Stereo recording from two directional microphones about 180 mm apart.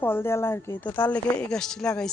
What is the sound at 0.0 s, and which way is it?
Speech, 10° left (ahead or behind).